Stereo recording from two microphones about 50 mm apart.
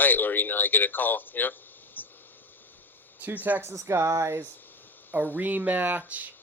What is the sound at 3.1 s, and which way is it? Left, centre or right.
Speech, right.